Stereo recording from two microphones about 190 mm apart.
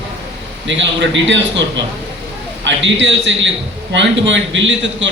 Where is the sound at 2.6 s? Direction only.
75° right (ahead or behind).